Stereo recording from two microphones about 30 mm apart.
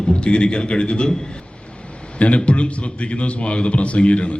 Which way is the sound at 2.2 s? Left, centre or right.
Left.